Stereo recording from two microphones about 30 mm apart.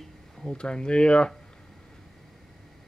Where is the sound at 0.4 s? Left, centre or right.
Left.